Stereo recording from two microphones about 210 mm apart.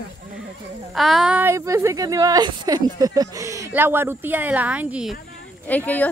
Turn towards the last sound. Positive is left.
turn(degrees=10)  # may be behind; listen again after turning